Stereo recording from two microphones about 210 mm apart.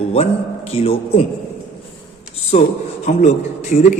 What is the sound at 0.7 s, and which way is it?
Speech, 30° left (ahead or behind).